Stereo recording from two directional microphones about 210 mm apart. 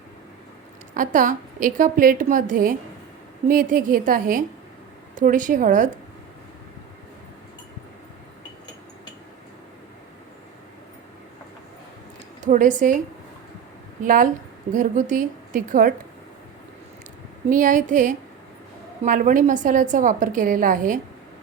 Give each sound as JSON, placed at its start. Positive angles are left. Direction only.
{"t": 0.9, "sound": "a woman's voice", "side_deg": -40}
{"t": 12.4, "sound": "a woman's voice", "side_deg": -35}
{"t": 14.0, "sound": "a woman's voice", "side_deg": -40}
{"t": 17.5, "sound": "a woman's voice", "side_deg": -40}